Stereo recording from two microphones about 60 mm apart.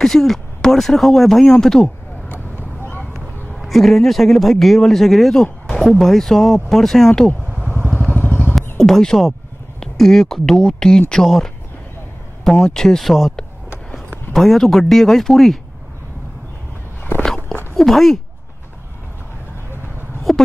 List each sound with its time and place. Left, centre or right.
0.0 s a man's voice: centre
2.2 s vehicle: left
3.5 s a man's voice: centre
7.4 s vehicle: centre
8.2 s vehicle: left
8.7 s speech: centre
14.3 s a man's voice: centre
17.7 s a man's voice: centre
20.3 s a sound: centre